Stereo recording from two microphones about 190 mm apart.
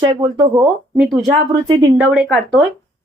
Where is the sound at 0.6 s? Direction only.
Centre (ahead or behind).